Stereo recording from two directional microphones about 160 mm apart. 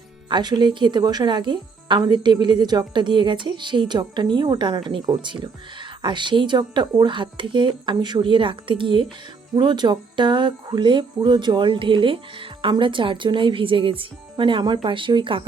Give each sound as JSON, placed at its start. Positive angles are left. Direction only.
{"t": 0.3, "sound": "a woman's voice", "side_deg": -30}